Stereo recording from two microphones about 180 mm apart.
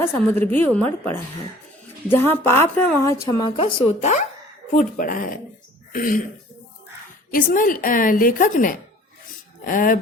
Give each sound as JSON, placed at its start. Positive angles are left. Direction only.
{"t": 0.0, "sound": "a woman's voice", "side_deg": 10}
{"t": 7.3, "sound": "a woman's voice", "side_deg": 50}